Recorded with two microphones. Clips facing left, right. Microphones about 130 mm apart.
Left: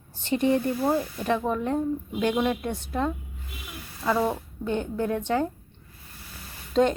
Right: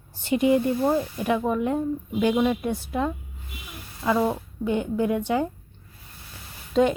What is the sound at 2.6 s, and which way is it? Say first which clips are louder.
Speech: right 2 dB; 10° right (ahead or behind).